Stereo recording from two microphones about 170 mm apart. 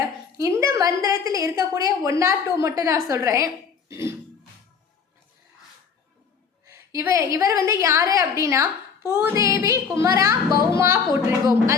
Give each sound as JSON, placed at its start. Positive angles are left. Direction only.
{"t": 0.3, "sound": "a woman's voice", "side_deg": -20}
{"t": 6.7, "sound": "a woman's voice", "side_deg": -15}